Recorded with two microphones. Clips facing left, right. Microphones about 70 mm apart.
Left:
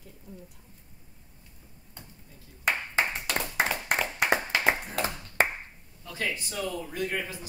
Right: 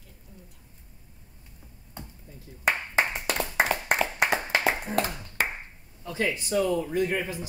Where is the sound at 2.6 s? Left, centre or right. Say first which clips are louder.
Right 2 dB; right.